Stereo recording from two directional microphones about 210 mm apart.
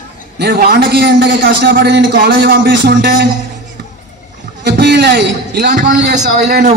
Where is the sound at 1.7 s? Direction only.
45° right (ahead or behind).